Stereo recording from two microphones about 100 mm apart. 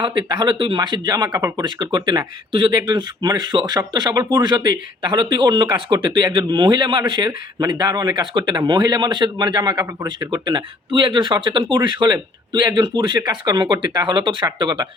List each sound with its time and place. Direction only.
0.0 s speech: 50° right (ahead or behind)